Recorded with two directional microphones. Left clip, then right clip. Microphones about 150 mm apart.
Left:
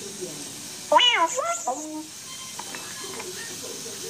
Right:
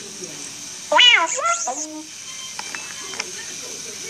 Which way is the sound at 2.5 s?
45° right (ahead or behind).